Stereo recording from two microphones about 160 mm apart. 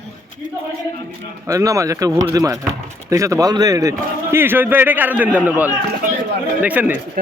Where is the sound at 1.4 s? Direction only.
20° right (ahead or behind).